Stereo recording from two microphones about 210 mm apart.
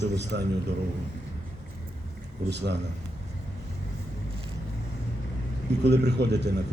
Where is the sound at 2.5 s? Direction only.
55° right (ahead or behind).